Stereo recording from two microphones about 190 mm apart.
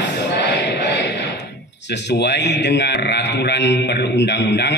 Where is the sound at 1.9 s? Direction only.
65° left (ahead or behind).